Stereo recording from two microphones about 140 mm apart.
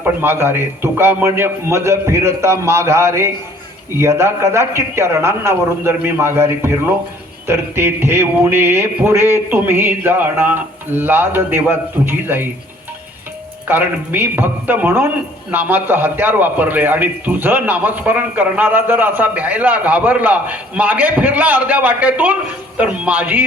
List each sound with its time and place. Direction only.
0.0 s a man's voice: 15° right (ahead or behind)
13.7 s a man's voice: 15° right (ahead or behind)